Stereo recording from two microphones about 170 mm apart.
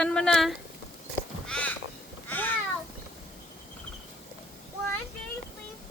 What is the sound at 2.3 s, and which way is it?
Cat, 10° left (ahead or behind).